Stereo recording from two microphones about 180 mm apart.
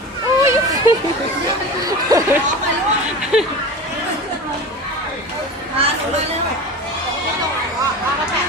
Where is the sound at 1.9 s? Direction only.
20° right (ahead or behind).